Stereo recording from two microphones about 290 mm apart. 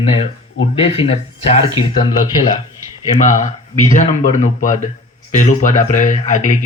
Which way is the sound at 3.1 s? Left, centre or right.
Left.